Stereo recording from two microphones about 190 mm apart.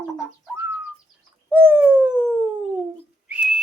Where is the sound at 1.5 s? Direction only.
10° right (ahead or behind).